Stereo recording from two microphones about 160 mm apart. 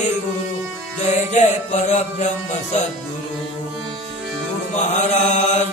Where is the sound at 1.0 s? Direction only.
45° left (ahead or behind).